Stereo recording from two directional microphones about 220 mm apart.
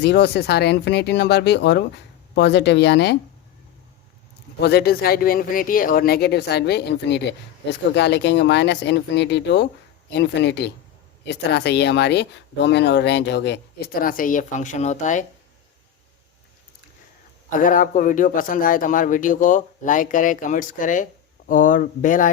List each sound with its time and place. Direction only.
0.0 s speech: 50° left (ahead or behind)
4.6 s speech: 45° left (ahead or behind)
17.5 s a man's voice: 35° left (ahead or behind)